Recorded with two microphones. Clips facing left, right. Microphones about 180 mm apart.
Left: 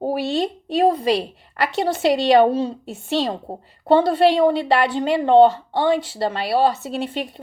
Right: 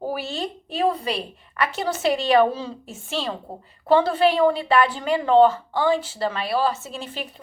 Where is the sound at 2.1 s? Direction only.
35° left (ahead or behind).